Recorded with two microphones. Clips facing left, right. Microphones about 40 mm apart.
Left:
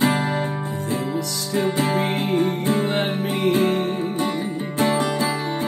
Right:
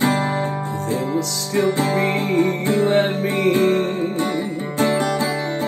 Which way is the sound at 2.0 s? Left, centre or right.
Right.